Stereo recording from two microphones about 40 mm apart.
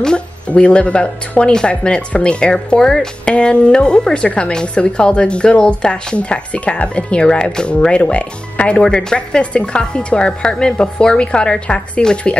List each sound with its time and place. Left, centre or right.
0.5 s speech: left; by 3.1 s centre
3.3 s speech: left